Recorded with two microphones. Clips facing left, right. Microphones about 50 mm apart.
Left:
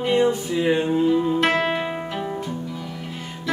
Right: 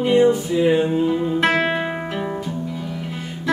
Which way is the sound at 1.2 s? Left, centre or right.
Centre.